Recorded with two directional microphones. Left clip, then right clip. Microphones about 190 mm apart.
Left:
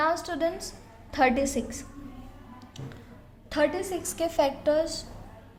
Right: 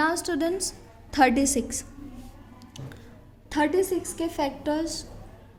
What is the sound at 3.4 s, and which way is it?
A woman's voice, 25° right (ahead or behind).